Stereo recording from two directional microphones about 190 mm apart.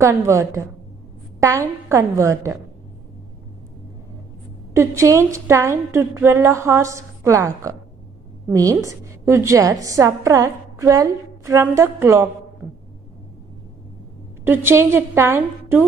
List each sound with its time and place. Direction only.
0.0 s a woman's voice: 15° right (ahead or behind)
4.7 s a woman's voice: 15° right (ahead or behind)
14.4 s a woman's voice: 10° right (ahead or behind)